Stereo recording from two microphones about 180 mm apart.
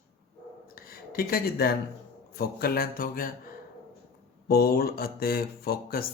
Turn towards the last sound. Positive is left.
turn(degrees=55)  # may be behind; listen again after turning